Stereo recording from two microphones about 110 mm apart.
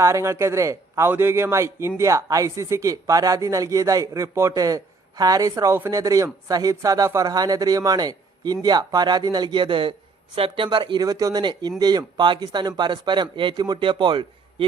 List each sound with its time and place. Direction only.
0.0 s a man's voice: 25° right (ahead or behind); by 14.3 s 45° right (ahead or behind)